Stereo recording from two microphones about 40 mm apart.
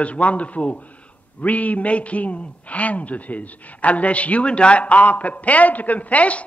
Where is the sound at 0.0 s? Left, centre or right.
Left.